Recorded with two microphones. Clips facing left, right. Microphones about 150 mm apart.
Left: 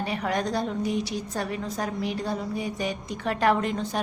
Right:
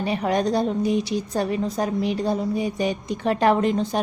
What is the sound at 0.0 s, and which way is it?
A woman's voice, 20° right (ahead or behind).